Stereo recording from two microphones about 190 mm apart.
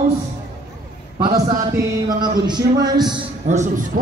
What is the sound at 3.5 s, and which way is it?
Speech, 40° right (ahead or behind).